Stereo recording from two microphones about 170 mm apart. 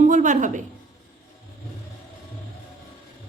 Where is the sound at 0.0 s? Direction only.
45° right (ahead or behind).